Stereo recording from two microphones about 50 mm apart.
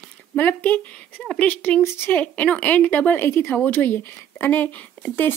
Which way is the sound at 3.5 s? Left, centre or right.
Left.